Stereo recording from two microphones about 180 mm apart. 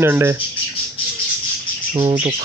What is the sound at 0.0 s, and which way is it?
Speech, 15° right (ahead or behind).